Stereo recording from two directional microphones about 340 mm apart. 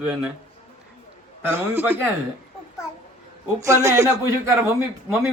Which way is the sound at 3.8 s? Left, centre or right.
Centre.